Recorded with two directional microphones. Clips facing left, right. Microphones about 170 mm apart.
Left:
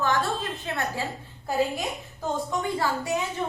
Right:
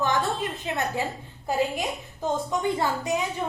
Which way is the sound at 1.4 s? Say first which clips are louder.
Even; 20° right (ahead or behind).